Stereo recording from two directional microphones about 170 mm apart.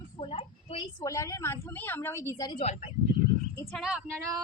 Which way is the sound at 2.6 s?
40° left (ahead or behind).